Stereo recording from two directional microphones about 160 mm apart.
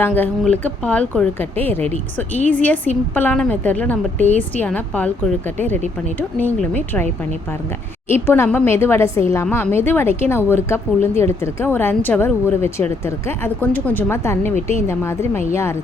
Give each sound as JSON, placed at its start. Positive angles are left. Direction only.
{"t": 0.0, "sound": "a woman's voice", "side_deg": 10}
{"t": 6.1, "sound": "a woman's voice", "side_deg": 10}